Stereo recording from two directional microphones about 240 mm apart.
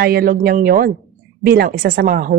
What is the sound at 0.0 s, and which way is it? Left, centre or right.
Speech, right.